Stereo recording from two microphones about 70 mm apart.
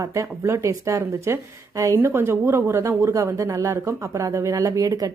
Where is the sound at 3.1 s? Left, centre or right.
Right.